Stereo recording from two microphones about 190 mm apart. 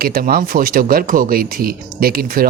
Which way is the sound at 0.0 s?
50° right (ahead or behind).